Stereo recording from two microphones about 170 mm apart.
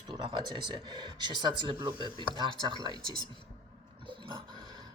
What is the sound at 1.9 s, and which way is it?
Speech, 25° left (ahead or behind).